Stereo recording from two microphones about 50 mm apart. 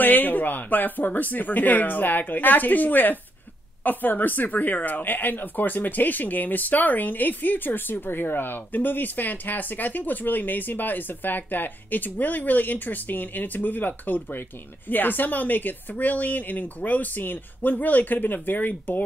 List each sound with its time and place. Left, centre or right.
0.0 s speech: left